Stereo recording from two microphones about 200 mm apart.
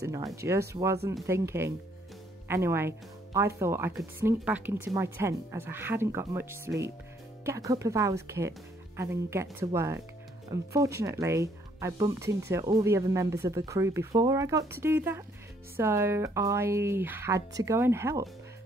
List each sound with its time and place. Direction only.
0.0 s speech: 15° right (ahead or behind)